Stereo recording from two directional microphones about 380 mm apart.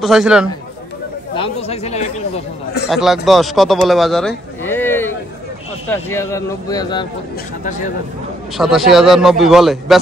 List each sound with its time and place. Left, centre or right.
0.0 s a man's voice: centre
1.3 s chatter: centre
2.9 s a man's voice: centre
8.5 s a man's voice: centre